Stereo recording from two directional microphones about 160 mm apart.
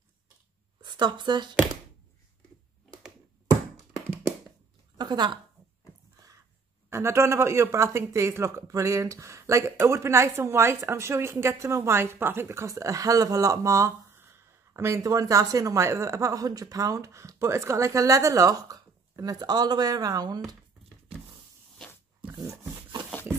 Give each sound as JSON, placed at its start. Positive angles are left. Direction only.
{"t": 0.8, "sound": "speech", "side_deg": -30}
{"t": 4.9, "sound": "a sound", "side_deg": -25}
{"t": 6.9, "sound": "speech", "side_deg": -15}
{"t": 22.4, "sound": "dog", "side_deg": -20}